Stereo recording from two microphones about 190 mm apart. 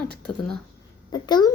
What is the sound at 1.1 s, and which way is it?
Speech, 20° left (ahead or behind).